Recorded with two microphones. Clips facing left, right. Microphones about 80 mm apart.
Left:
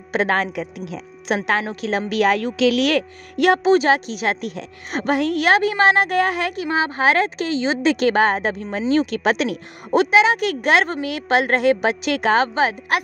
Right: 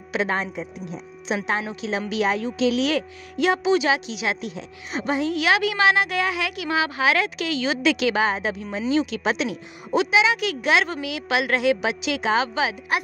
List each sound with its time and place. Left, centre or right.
0.1 s a woman's voice: left